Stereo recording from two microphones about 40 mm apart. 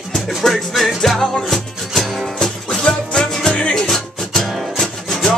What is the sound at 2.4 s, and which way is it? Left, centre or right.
Music, centre.